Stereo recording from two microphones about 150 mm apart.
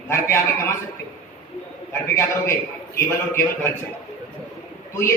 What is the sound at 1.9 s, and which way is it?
A man's voice, 20° left (ahead or behind).